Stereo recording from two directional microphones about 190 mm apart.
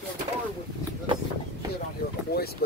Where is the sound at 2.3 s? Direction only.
55° left (ahead or behind).